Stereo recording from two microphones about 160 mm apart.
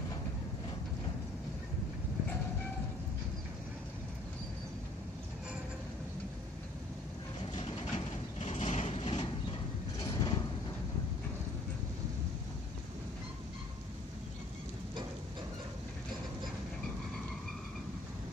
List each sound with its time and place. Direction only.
7.5 s vehicle: 40° left (ahead or behind)
9.9 s vehicle: 25° left (ahead or behind)